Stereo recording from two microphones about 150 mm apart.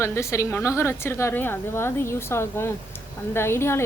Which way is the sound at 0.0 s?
20° left (ahead or behind).